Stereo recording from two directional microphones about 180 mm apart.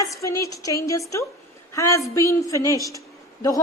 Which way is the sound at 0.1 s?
15° left (ahead or behind).